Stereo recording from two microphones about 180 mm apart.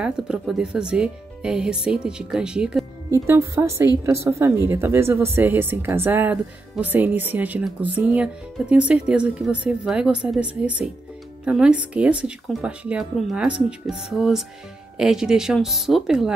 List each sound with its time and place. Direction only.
0.0 s a woman's voice: 5° right (ahead or behind)